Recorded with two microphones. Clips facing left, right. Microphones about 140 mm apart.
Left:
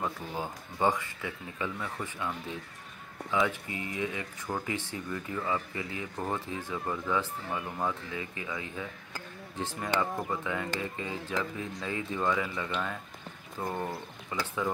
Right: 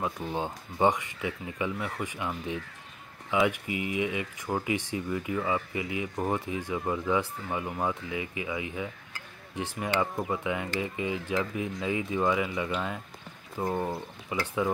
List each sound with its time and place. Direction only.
0.3 s speech: 20° right (ahead or behind)